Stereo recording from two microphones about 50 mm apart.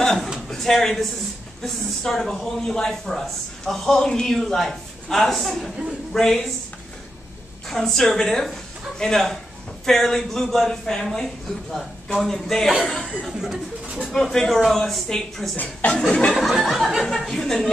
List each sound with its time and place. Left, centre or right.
0.0 s a sound: centre
0.5 s a man's voice: centre
7.6 s a man's voice: centre
14.0 s speech: centre
15.5 s a woman's voice: left
16.1 s a sound: centre
16.3 s a man's voice: centre